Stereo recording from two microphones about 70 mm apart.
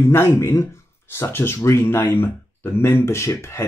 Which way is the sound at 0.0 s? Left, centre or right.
Left.